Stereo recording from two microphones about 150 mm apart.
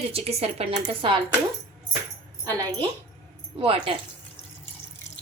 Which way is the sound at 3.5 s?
35° right (ahead or behind).